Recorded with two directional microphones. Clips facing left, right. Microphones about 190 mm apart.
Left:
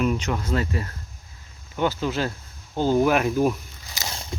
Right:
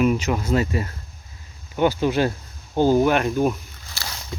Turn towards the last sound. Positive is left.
turn(degrees=20)  # may be behind; listen again after turning